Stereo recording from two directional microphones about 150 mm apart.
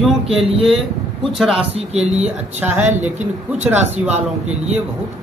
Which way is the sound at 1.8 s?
45° right (ahead or behind).